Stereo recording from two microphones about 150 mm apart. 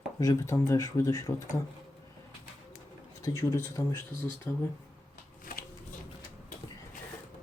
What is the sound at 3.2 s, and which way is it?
Speech, 20° left (ahead or behind).